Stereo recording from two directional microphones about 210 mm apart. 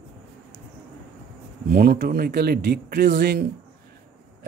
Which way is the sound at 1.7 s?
45° right (ahead or behind).